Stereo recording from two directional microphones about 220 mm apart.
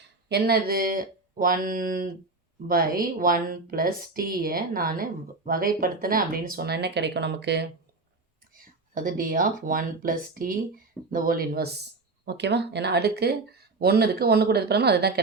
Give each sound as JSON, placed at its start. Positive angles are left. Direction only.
{"t": 0.3, "sound": "a woman's voice", "side_deg": -45}